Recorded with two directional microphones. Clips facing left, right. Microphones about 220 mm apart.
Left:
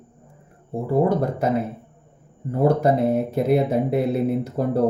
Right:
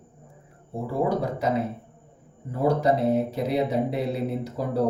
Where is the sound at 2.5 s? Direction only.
55° left (ahead or behind).